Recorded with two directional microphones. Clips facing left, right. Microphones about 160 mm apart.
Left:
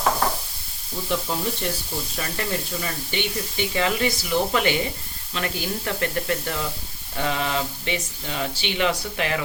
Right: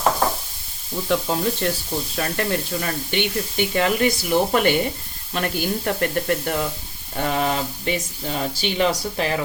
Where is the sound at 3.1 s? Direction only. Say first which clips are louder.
Right 4 dB; 60° right (ahead or behind).